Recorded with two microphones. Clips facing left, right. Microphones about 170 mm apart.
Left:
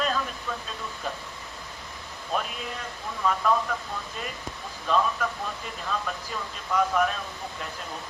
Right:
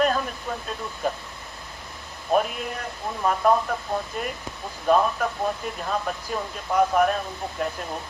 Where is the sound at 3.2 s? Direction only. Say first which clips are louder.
Right 4 dB; 45° right (ahead or behind).